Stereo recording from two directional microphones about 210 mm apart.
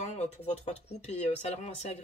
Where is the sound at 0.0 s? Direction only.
30° left (ahead or behind).